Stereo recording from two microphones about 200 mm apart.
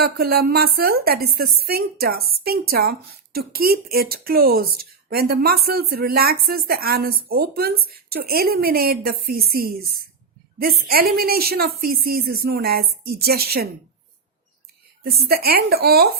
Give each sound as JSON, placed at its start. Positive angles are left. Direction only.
{"t": 0.0, "sound": "speech", "side_deg": -50}
{"t": 15.0, "sound": "speech", "side_deg": -50}